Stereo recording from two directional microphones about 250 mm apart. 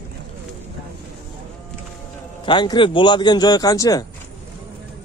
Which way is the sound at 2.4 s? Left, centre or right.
Centre.